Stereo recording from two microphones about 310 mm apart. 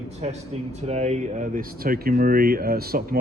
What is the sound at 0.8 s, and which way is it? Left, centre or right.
Speech, right.